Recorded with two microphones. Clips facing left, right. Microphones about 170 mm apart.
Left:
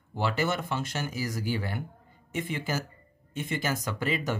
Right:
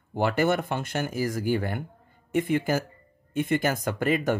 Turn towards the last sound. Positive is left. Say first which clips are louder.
# right 6 dB
turn(degrees=-55)  # may be behind; listen again after turning